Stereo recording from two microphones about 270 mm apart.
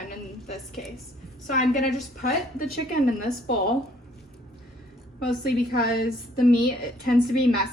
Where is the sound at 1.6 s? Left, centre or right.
Left.